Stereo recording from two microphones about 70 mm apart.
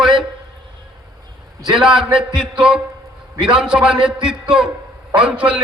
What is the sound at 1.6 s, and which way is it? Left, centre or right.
A man's voice, centre.